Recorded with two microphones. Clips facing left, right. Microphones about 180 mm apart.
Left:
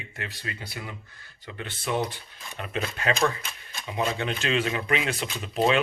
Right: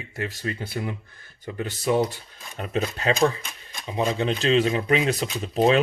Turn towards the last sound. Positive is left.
turn(degrees=-35)  # may be behind; listen again after turning